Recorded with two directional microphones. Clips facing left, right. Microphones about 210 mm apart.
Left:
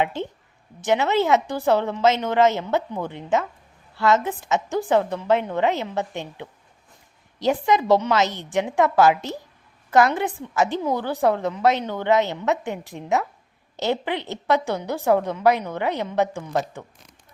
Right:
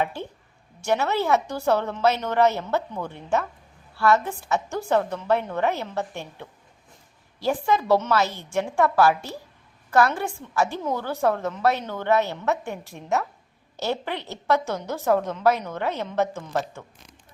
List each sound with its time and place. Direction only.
0.0 s a woman's voice: 20° left (ahead or behind)
7.3 s a woman's voice: 20° left (ahead or behind)